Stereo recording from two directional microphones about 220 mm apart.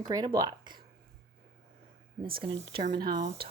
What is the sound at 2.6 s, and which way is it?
Speech, 20° right (ahead or behind).